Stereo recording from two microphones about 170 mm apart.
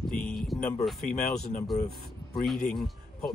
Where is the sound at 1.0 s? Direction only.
60° left (ahead or behind).